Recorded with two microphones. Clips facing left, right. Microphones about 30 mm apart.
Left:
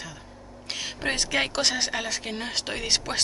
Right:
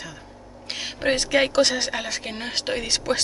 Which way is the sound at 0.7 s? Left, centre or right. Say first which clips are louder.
Right 5 dB; centre.